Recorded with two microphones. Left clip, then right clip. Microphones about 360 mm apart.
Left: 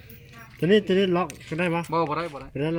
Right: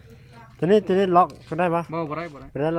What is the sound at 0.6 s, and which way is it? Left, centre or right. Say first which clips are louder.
Speech: right 2 dB; centre.